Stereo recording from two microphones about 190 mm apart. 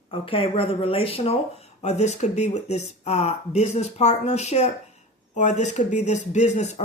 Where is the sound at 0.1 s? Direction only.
30° left (ahead or behind).